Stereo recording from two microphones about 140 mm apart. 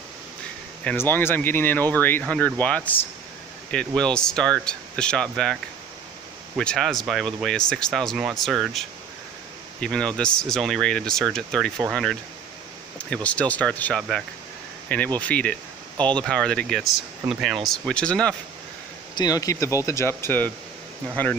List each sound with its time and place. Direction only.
0.8 s speech: 15° left (ahead or behind)
6.6 s speech: 5° left (ahead or behind)
15.1 s speech: 10° left (ahead or behind)
19.1 s speech: 25° left (ahead or behind)